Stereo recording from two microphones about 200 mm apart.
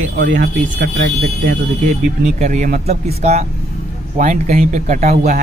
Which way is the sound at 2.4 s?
40° right (ahead or behind).